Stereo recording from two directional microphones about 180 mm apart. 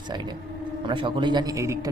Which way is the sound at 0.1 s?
25° right (ahead or behind).